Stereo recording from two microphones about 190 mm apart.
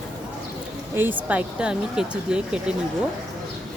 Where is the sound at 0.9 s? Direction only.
10° right (ahead or behind).